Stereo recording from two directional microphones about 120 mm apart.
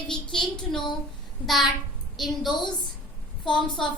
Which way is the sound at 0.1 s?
45° left (ahead or behind).